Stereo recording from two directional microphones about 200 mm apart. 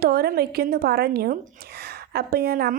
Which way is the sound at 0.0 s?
50° right (ahead or behind).